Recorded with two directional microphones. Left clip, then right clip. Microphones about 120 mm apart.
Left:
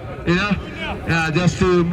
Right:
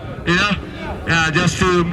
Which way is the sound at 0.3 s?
45° right (ahead or behind).